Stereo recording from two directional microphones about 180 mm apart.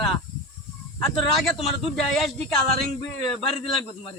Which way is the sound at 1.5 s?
Centre (ahead or behind).